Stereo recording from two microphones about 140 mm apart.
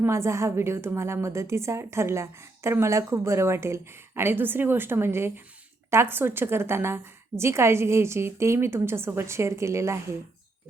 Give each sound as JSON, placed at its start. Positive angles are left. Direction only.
{"t": 0.0, "sound": "a woman's voice", "side_deg": -20}